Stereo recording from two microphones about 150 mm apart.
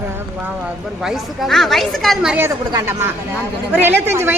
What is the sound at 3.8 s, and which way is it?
Speech, 15° right (ahead or behind).